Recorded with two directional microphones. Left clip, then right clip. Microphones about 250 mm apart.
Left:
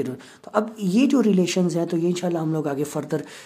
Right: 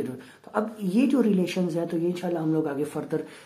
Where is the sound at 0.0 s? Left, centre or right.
Left.